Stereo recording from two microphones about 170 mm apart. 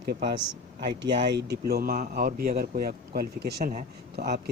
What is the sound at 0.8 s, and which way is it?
A man's voice, 80° right.